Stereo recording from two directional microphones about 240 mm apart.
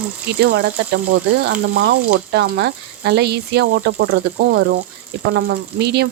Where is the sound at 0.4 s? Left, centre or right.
Right.